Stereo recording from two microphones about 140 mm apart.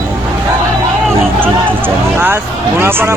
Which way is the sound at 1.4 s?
15° right (ahead or behind).